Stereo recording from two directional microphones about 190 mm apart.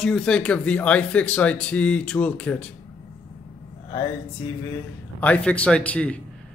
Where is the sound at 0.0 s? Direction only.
5° left (ahead or behind).